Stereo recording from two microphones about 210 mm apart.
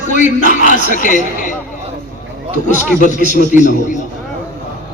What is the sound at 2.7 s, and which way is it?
A man's voice, 35° left (ahead or behind).